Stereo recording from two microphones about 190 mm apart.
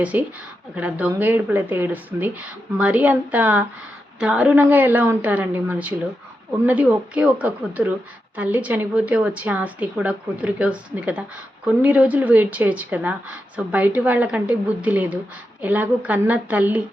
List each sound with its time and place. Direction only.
0.0 s speech: 10° right (ahead or behind)